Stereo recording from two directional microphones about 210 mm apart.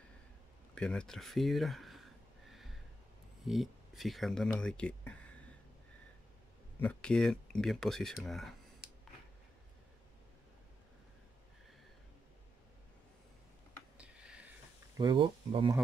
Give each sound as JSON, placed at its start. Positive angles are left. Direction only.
{"t": 0.7, "sound": "speech", "side_deg": 5}
{"t": 3.4, "sound": "speech", "side_deg": 0}
{"t": 6.8, "sound": "speech", "side_deg": 5}
{"t": 13.9, "sound": "a sound", "side_deg": -5}
{"t": 15.0, "sound": "speech", "side_deg": -20}